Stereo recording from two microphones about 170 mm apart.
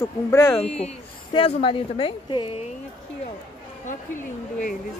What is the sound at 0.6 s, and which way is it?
A woman's voice, 40° left (ahead or behind).